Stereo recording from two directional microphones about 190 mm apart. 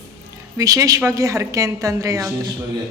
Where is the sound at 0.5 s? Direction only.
20° right (ahead or behind).